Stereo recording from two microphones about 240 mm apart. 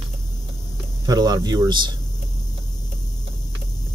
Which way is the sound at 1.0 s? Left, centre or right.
Centre.